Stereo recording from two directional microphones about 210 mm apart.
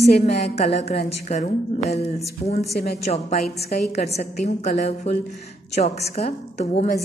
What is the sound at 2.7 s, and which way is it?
Speech, 45° left (ahead or behind).